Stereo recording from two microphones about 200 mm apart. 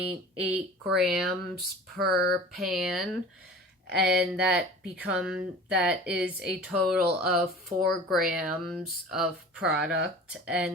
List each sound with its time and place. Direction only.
0.0 s speech: 5° right (ahead or behind)
2.0 s speech: 55° right (ahead or behind)
2.6 s speech: centre (ahead or behind)
7.7 s speech: 20° right (ahead or behind)
8.1 s speech: 5° right (ahead or behind)